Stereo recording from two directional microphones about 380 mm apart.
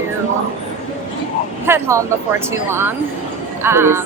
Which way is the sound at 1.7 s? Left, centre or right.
Centre.